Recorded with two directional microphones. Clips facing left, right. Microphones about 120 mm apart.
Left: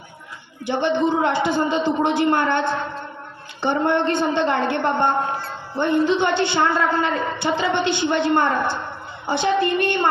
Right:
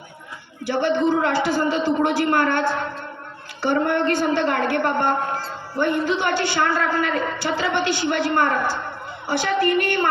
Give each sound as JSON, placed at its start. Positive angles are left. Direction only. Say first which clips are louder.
{"t": 0.6, "sound": "a man's voice", "louder": "even", "side_deg": 20}